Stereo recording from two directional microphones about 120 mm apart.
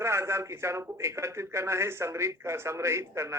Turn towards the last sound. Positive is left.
turn(degrees=-25)  # may be behind; listen again after turning